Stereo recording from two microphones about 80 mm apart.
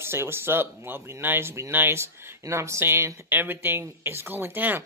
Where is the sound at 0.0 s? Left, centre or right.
Right.